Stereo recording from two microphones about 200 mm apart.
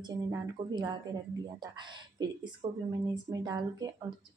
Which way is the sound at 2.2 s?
20° right (ahead or behind).